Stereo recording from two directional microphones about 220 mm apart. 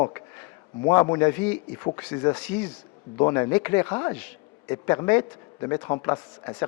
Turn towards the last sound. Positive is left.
turn(degrees=20)  # may be behind; listen again after turning